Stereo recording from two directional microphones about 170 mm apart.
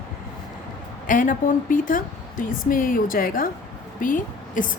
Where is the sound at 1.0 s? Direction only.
50° left (ahead or behind).